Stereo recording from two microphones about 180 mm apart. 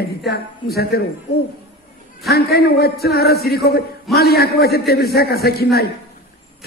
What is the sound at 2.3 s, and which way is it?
A man's voice, 60° left (ahead or behind).